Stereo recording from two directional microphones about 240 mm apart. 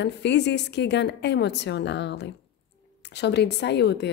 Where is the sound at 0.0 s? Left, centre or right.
Left.